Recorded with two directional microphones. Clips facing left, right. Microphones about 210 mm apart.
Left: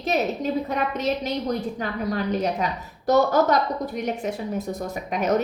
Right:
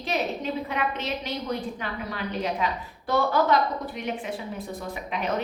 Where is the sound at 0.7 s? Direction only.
40° left (ahead or behind).